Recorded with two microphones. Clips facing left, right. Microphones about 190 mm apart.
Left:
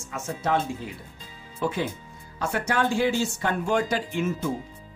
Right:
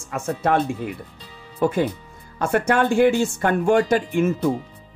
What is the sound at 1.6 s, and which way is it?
Speech, 45° right (ahead or behind).